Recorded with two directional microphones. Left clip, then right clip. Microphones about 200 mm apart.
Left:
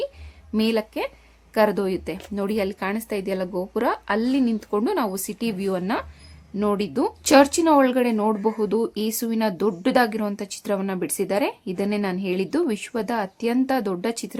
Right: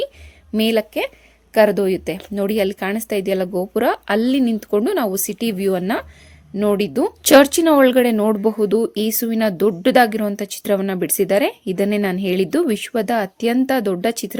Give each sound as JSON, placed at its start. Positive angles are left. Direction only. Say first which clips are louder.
{"t": 0.5, "sound": "speech", "louder": "right 5 dB", "side_deg": -15}